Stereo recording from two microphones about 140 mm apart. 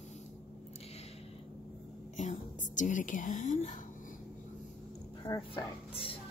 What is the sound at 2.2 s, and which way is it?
Speech, 60° left (ahead or behind).